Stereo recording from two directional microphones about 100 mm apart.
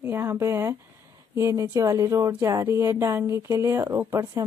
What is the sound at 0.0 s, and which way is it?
Speech, 25° right (ahead or behind).